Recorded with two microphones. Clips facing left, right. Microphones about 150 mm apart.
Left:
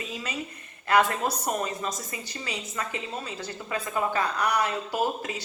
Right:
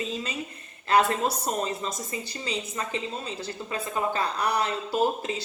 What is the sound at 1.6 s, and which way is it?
A woman's voice, 25° right (ahead or behind).